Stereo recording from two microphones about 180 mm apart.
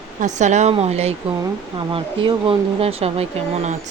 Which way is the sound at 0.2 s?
40° right (ahead or behind).